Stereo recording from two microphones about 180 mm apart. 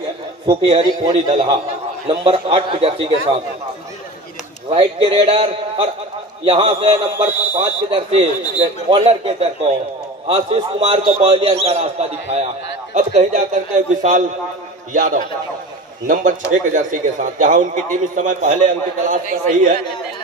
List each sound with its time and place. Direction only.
0.5 s a man's voice: 30° right (ahead or behind)
4.6 s a man's voice: 30° right (ahead or behind); by 19.8 s 45° right (ahead or behind)